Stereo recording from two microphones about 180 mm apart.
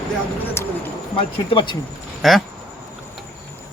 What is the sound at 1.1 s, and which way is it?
Speech, 30° left (ahead or behind).